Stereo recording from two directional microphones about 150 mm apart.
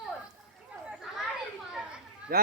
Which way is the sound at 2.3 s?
80° right.